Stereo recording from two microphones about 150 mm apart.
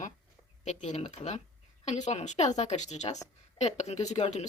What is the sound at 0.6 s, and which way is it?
Speech, 50° left (ahead or behind).